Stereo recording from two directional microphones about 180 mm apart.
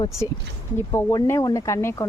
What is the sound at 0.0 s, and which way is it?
Speech, 15° left (ahead or behind).